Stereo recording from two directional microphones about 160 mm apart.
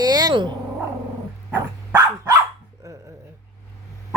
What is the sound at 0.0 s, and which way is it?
Cat, 25° right (ahead or behind).